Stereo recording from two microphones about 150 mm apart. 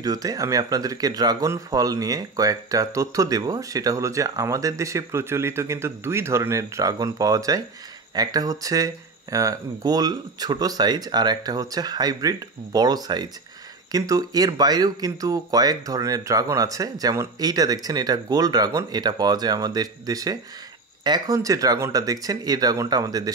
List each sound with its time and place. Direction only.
0.0 s speech: 25° right (ahead or behind)